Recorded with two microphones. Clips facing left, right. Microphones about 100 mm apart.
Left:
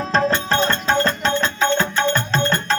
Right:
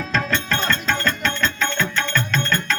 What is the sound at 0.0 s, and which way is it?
Music, 35° left (ahead or behind).